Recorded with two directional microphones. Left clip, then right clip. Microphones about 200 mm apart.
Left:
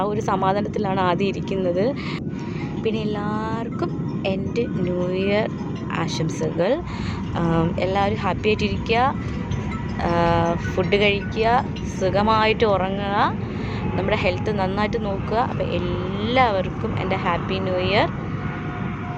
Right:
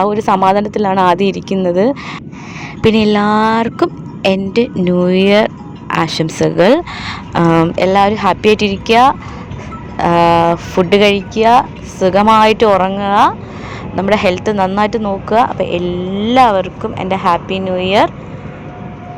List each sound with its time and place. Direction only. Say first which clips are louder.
0.0 s speech: right 10 dB; 40° right (ahead or behind)
2.8 s speech: right 15 dB; 55° right (ahead or behind); by 18.1 s 35° right (ahead or behind)